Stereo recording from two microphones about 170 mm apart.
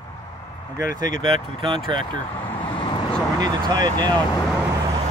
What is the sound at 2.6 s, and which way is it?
Vehicle, 30° left (ahead or behind).